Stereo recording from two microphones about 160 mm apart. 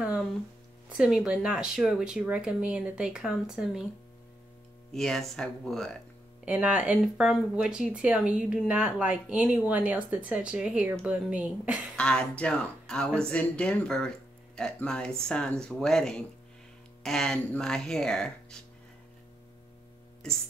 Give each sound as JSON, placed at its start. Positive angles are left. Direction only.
{"t": 0.8, "sound": "speech", "side_deg": -5}
{"t": 4.9, "sound": "speech", "side_deg": 5}
{"t": 6.4, "sound": "speech", "side_deg": -10}
{"t": 12.0, "sound": "speech", "side_deg": 5}
{"t": 20.2, "sound": "speech", "side_deg": 5}